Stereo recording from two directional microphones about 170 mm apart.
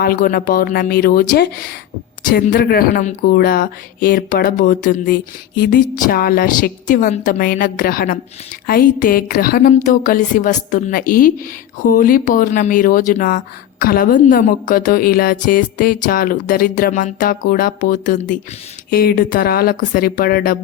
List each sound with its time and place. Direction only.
0.0 s a woman's voice: 60° left (ahead or behind)
18.9 s a woman's voice: 60° left (ahead or behind)